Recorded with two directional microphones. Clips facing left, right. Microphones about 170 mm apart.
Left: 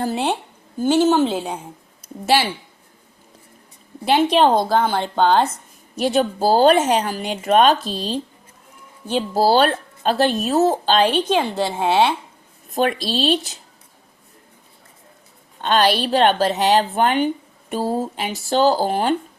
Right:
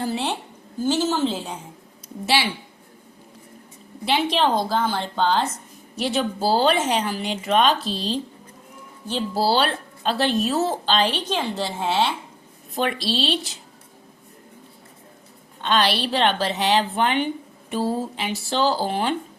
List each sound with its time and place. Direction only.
0.0 s a woman's voice: 50° left (ahead or behind)
2.2 s speech: 45° left (ahead or behind)
4.0 s a woman's voice: 50° left (ahead or behind)
6.0 s speech: 45° left (ahead or behind)
12.7 s speech: 45° left (ahead or behind)
15.6 s speech: 45° left (ahead or behind)